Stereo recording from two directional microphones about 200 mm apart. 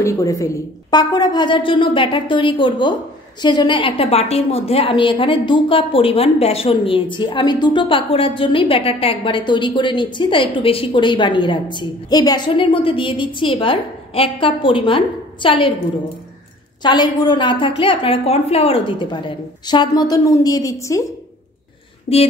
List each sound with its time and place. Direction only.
0.0 s a woman's voice: 15° left (ahead or behind)
16.8 s a woman's voice: 20° left (ahead or behind)